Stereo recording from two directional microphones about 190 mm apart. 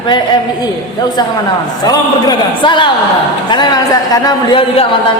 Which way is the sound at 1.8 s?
20° left (ahead or behind).